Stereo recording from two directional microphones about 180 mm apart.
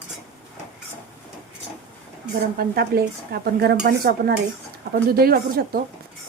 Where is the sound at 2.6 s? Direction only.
60° right (ahead or behind).